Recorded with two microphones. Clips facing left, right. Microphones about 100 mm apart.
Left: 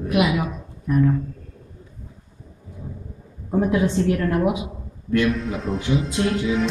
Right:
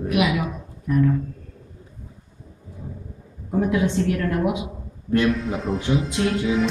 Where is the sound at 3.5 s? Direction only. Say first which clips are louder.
Left 1 dB; 25° left (ahead or behind).